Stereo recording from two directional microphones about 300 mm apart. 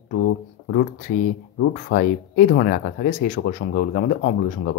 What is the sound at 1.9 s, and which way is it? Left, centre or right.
Speech, left.